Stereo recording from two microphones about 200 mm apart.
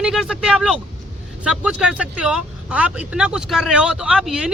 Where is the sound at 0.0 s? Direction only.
5° right (ahead or behind).